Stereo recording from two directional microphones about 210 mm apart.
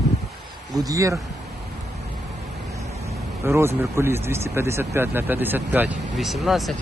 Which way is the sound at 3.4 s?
10° right (ahead or behind).